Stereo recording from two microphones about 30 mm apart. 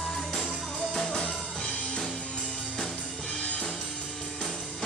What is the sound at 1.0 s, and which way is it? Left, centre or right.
Music, left.